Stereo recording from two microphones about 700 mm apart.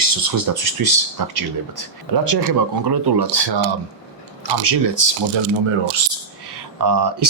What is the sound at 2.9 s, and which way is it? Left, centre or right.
Speech, right.